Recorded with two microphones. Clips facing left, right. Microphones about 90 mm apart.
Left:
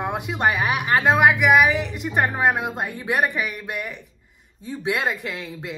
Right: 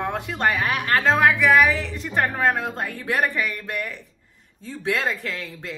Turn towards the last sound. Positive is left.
turn(degrees=15)  # may be behind; listen again after turning